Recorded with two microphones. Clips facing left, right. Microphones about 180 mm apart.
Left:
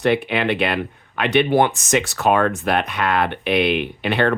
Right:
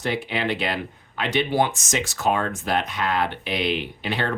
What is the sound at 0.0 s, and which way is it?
Speech, 65° left (ahead or behind).